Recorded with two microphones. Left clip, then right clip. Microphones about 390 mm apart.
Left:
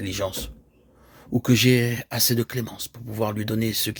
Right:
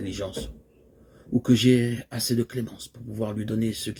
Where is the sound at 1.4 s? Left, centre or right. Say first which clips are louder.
Left 1 dB; left.